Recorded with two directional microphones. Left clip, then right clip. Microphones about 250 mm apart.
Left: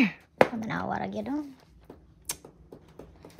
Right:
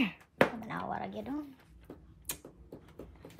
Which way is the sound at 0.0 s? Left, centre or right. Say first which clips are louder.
Left 6 dB; left.